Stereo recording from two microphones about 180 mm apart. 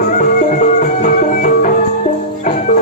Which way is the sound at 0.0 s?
45° left (ahead or behind).